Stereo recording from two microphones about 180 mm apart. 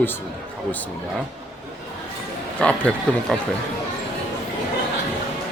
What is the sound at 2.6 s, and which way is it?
Speech, 5° left (ahead or behind).